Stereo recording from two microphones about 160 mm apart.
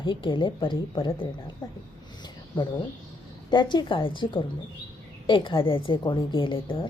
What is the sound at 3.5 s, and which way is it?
A woman's voice, 30° left (ahead or behind).